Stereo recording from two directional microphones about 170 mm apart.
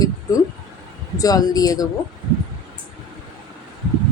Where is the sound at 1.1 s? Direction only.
20° left (ahead or behind).